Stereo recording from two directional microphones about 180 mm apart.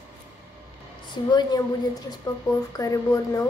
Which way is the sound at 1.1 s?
25° left (ahead or behind).